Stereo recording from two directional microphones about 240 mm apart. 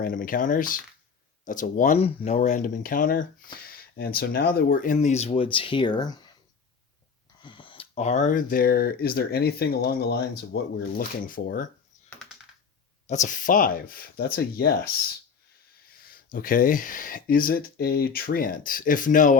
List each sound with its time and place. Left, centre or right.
0.0 s speech: left; by 6.1 s centre
7.4 s speech: left
13.1 s speech: left
16.0 s speech: left